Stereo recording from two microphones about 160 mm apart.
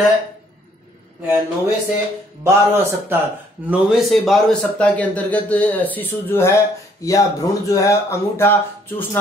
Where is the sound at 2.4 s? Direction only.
15° right (ahead or behind).